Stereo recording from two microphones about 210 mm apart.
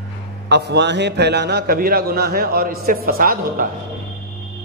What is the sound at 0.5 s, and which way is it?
A man's voice, 55° right (ahead or behind).